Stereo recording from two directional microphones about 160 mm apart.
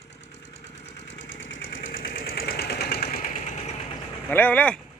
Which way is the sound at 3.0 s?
50° left (ahead or behind).